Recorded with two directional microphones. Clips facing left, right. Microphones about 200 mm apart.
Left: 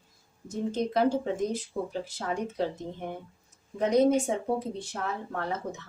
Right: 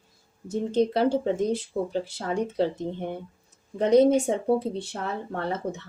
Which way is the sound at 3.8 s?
30° right (ahead or behind).